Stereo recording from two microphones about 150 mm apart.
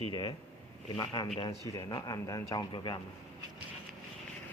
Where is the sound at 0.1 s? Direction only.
30° left (ahead or behind).